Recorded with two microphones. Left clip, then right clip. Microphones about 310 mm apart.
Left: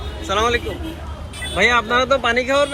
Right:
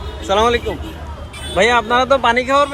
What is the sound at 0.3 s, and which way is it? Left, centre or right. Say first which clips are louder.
Speech: right 4 dB; centre.